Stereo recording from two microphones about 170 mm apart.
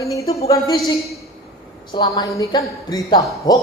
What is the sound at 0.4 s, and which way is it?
Speech, 20° left (ahead or behind).